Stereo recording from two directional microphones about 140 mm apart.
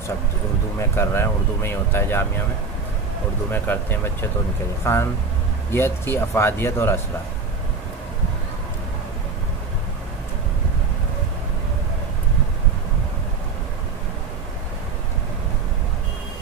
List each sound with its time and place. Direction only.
0.7 s speech: 20° left (ahead or behind)
3.5 s speech: 15° left (ahead or behind)